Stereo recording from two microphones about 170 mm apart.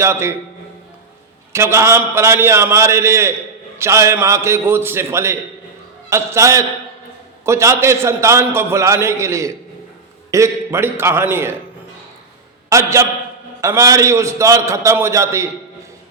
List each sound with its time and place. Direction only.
0.0 s a man's voice: 15° right (ahead or behind)
1.5 s a man's voice: 15° right (ahead or behind)
12.7 s a man's voice: 15° right (ahead or behind)